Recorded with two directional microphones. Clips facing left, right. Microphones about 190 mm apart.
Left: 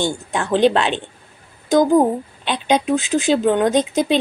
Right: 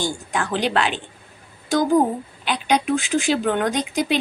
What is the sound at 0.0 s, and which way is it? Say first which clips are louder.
Speech: left 3 dB; 25° left (ahead or behind).